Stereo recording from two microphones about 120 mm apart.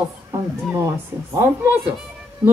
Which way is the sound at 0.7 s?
25° right (ahead or behind).